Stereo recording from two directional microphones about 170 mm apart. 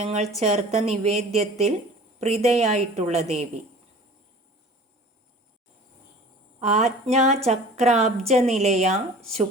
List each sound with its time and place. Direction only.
0.0 s a woman's voice: 40° right (ahead or behind)
6.6 s a woman's voice: 40° right (ahead or behind)